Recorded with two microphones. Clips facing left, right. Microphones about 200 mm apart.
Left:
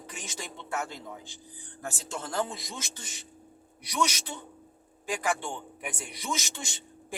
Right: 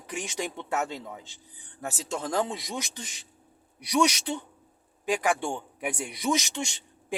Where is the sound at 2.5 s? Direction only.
15° right (ahead or behind).